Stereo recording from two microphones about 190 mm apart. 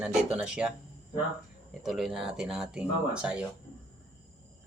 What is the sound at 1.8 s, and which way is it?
Speech, centre (ahead or behind).